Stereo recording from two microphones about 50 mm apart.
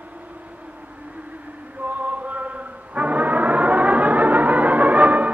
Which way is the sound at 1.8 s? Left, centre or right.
Right.